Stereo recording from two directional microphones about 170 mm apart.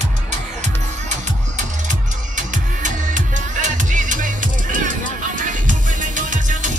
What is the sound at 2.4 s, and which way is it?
Music, 50° right (ahead or behind).